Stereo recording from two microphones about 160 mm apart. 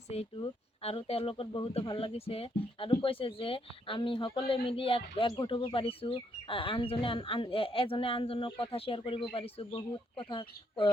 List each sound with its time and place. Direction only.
0.1 s speech: 35° left (ahead or behind)